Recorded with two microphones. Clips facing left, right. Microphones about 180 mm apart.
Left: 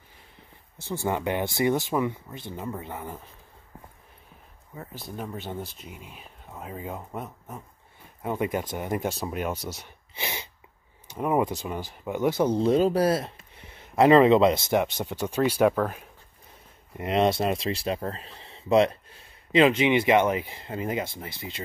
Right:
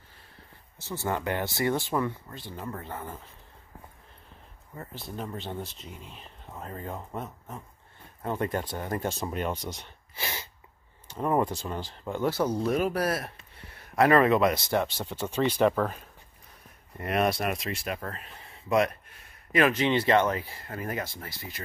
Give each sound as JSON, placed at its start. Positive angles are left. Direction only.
{"t": 0.8, "sound": "speech", "side_deg": 15}
{"t": 4.7, "sound": "speech", "side_deg": 0}
{"t": 10.1, "sound": "sneeze", "side_deg": 20}
{"t": 11.1, "sound": "speech", "side_deg": 10}
{"t": 16.9, "sound": "speech", "side_deg": 20}